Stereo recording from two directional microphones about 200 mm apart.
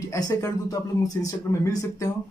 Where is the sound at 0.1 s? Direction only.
15° left (ahead or behind).